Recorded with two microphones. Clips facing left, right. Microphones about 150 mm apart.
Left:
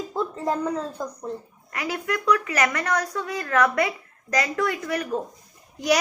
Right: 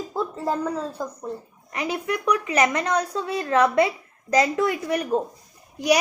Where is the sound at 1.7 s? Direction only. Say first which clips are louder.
Right 1 dB; 20° right (ahead or behind).